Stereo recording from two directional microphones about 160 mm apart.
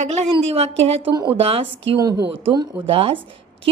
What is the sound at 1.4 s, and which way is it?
Speech, 35° right (ahead or behind).